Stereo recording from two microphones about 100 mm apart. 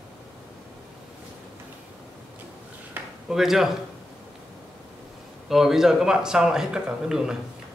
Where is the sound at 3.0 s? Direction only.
20° right (ahead or behind).